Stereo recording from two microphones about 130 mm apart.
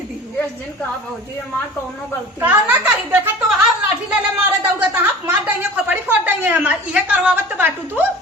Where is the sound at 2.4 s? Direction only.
10° right (ahead or behind).